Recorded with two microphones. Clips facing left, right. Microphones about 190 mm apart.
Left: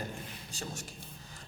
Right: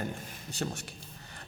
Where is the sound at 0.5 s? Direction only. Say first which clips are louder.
Right 7 dB; 65° right (ahead or behind).